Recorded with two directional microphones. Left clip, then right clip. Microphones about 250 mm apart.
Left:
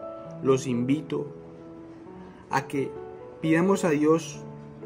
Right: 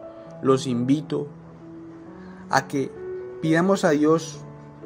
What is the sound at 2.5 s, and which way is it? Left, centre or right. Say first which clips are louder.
A man's voice: right 5 dB; centre.